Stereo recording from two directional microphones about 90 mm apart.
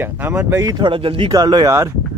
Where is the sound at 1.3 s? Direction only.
45° right (ahead or behind).